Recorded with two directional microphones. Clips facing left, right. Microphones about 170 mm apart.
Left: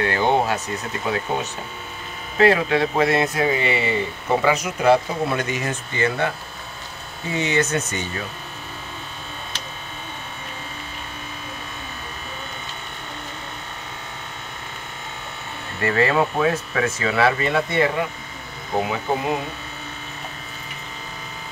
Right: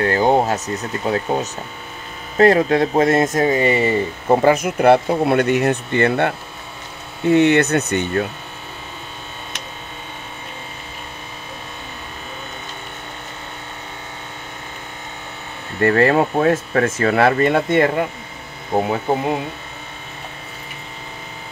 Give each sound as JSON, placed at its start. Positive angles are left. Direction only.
{"t": 0.0, "sound": "speech", "side_deg": -40}
{"t": 15.8, "sound": "speech", "side_deg": -50}
{"t": 18.7, "sound": "speech", "side_deg": -40}